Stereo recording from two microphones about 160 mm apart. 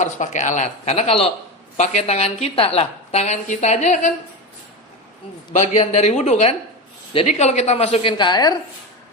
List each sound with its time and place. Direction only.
0.0 s a woman's voice: 50° left (ahead or behind)
5.5 s a woman's voice: 45° left (ahead or behind); by 8.5 s 25° left (ahead or behind)